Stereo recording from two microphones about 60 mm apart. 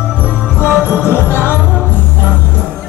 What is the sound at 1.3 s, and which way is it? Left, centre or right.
Music, left.